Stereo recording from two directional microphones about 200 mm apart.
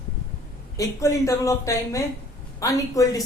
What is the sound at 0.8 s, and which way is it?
A woman's voice, 15° left (ahead or behind).